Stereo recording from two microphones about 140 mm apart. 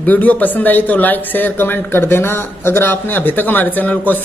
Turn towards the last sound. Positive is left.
turn(degrees=15)  # may be behind; listen again after turning